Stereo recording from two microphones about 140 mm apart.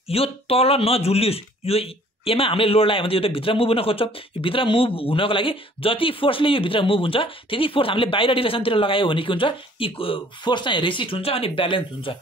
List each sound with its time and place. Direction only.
0.1 s speech: 45° left (ahead or behind)